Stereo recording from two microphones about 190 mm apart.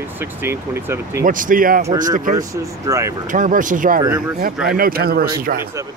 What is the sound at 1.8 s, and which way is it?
Speech, 20° right (ahead or behind).